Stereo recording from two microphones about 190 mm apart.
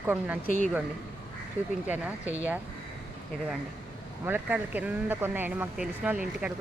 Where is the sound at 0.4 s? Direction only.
45° left (ahead or behind).